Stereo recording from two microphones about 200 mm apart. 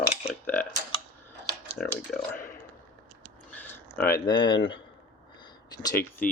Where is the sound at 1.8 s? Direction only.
5° left (ahead or behind).